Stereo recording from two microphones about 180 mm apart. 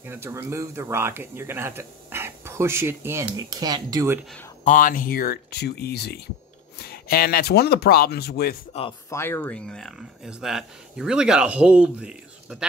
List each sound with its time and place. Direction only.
0.0 s speech: 10° right (ahead or behind)
4.6 s speech: 45° left (ahead or behind)
9.1 s speech: 15° left (ahead or behind); by 12.6 s 5° right (ahead or behind)